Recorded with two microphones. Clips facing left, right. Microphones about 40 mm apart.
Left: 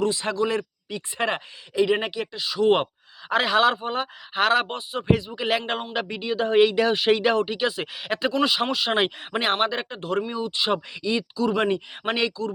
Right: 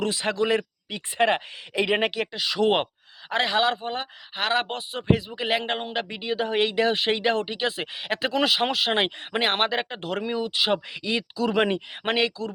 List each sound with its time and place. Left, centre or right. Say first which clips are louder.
0.0 s speech: left 1 dB; right
2.8 s speech: left 4 dB; centre
5.4 s speech: left 1 dB; centre
6.4 s speech: left 4 dB; centre
8.4 s speech: right 2 dB; right
8.9 s speech: left 1 dB; centre
9.6 s speech: even; right
11.5 s speech: even; right